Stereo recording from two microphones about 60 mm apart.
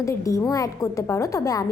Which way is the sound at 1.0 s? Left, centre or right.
Left.